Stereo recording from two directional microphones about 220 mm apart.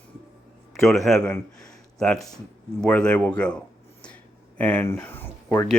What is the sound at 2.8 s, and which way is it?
Speech, 5° left (ahead or behind).